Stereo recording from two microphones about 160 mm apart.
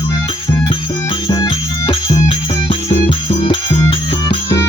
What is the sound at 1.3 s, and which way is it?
Music, 25° left (ahead or behind).